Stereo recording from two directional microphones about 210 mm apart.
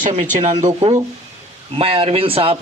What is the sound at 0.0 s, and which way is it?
A man's voice, 35° right (ahead or behind).